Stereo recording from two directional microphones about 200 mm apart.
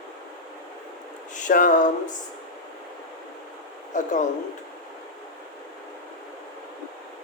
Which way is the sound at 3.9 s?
40° left (ahead or behind).